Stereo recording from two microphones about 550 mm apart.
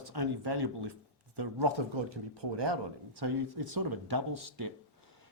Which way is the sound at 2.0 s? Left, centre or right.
Right.